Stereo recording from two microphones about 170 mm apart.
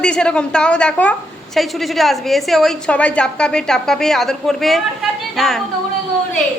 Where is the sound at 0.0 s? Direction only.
5° left (ahead or behind).